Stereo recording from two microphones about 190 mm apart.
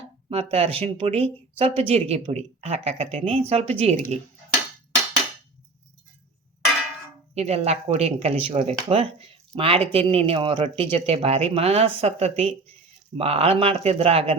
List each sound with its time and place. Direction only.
0.5 s speech: 30° right (ahead or behind)
7.3 s speech: 35° right (ahead or behind)